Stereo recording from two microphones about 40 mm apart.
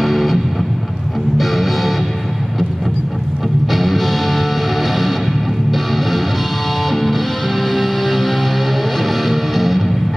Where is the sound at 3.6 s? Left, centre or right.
Centre.